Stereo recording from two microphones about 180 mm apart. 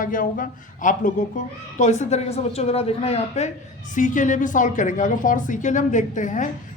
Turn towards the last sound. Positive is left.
turn(degrees=45)  # may be behind; listen again after turning